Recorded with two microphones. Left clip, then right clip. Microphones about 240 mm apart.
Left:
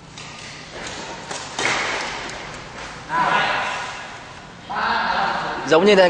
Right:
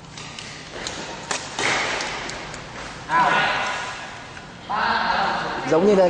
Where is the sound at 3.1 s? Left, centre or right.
Centre.